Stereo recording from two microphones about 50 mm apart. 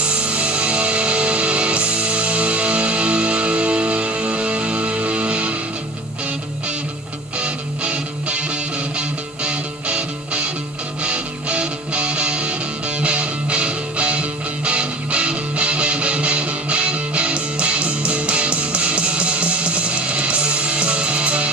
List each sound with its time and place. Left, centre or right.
0.0 s music: right
7.3 s music: right